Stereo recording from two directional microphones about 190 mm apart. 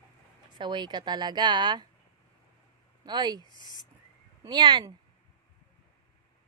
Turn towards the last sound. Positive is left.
turn(degrees=-20)  # may be behind; listen again after turning